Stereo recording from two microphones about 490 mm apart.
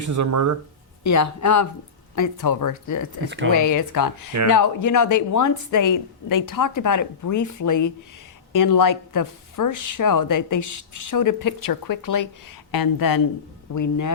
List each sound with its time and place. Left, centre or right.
0.0 s speech: right
1.0 s a woman's voice: left
3.2 s speech: right
3.5 s a woman's voice: left